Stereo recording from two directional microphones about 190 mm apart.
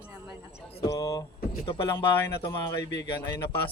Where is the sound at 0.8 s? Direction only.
20° left (ahead or behind).